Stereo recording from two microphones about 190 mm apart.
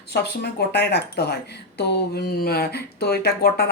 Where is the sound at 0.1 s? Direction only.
60° left (ahead or behind).